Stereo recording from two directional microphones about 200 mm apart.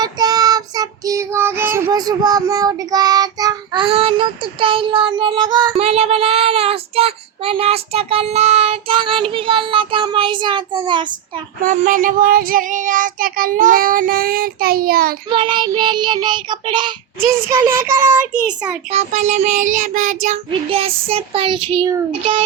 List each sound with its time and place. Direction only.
0.0 s child singing: 20° right (ahead or behind)
5.8 s child singing: 30° right (ahead or behind)
11.6 s child singing: 40° right (ahead or behind)
15.3 s child singing: 25° right (ahead or behind)
18.9 s child singing: 35° right (ahead or behind)